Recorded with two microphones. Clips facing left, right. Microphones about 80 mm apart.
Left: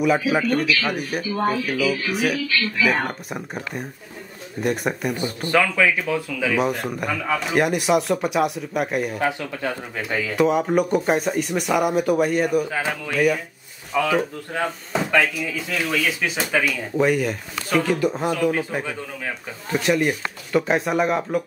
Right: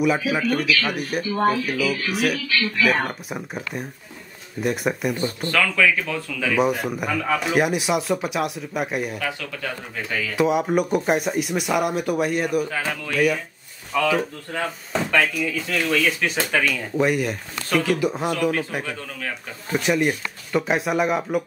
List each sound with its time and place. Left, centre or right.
0.0 s speech: centre
5.1 s speech: centre
6.5 s speech: centre
9.2 s speech: left
10.3 s speech: centre
12.6 s speech: centre
13.1 s speech: centre
13.9 s speech: centre
15.1 s speech: centre
19.7 s speech: centre